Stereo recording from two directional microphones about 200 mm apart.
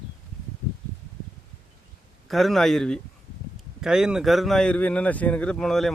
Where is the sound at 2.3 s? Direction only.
Centre (ahead or behind).